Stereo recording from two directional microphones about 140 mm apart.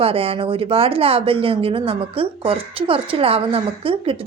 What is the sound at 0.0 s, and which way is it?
A woman's voice, 45° right (ahead or behind).